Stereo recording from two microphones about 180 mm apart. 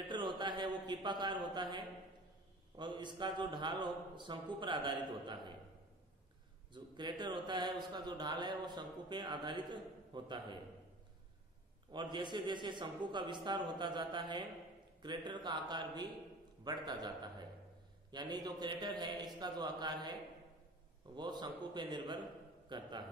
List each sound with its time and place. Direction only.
0.1 s a sound: 25° right (ahead or behind)
2.8 s a man's voice: 25° right (ahead or behind)
6.7 s a man's voice: 25° right (ahead or behind)
11.9 s a man's voice: 25° right (ahead or behind)